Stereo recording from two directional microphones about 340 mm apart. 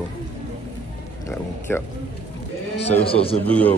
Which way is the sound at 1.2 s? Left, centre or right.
Centre.